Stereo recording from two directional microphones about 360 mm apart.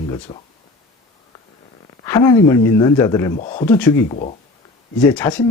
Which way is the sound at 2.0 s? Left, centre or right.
Centre.